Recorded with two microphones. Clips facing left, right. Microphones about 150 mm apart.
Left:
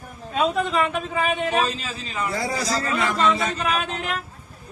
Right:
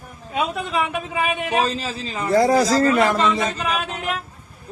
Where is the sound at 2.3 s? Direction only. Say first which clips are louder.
Right 13 dB; 50° right (ahead or behind).